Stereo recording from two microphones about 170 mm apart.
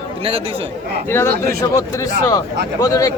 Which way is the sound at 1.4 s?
20° left (ahead or behind).